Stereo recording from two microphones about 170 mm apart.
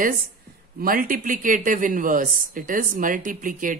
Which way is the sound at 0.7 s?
55° right (ahead or behind).